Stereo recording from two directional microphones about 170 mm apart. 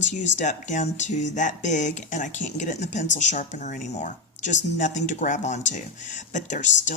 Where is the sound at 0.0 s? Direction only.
45° left (ahead or behind).